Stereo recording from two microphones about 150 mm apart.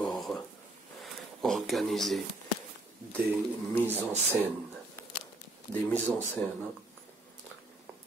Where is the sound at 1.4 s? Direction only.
Centre (ahead or behind).